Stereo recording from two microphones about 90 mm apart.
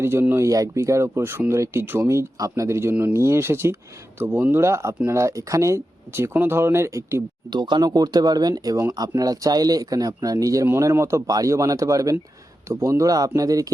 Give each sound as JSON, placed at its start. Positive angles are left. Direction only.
{"t": 0.0, "sound": "speech", "side_deg": -25}
{"t": 7.5, "sound": "speech", "side_deg": -60}